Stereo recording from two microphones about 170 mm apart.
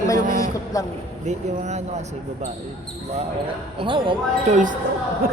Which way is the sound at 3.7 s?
30° right (ahead or behind).